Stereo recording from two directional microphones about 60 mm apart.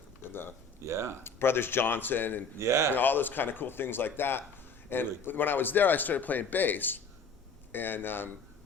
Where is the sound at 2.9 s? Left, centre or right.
Left.